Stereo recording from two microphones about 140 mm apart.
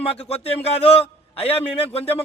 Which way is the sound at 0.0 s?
45° left (ahead or behind).